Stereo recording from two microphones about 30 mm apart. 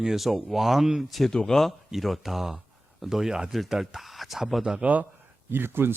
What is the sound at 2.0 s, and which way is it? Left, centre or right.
Speech, centre.